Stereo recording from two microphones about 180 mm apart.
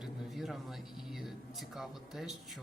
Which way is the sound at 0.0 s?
Centre (ahead or behind).